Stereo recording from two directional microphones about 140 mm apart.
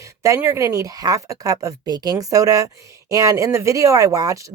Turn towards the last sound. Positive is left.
turn(degrees=-25)  # may be behind; listen again after turning